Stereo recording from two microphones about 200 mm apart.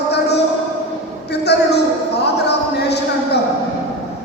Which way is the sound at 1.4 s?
55° left (ahead or behind).